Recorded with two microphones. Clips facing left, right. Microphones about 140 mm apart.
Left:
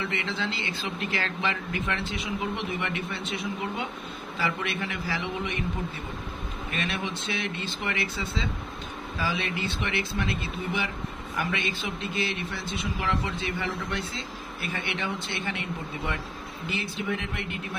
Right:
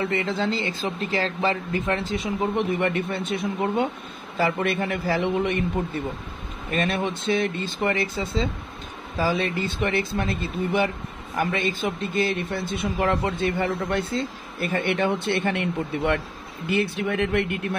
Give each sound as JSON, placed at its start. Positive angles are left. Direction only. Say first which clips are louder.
{"t": 0.0, "sound": "speech", "louder": "right 7 dB", "side_deg": -45}
{"t": 6.7, "sound": "speech", "louder": "right 8 dB", "side_deg": -45}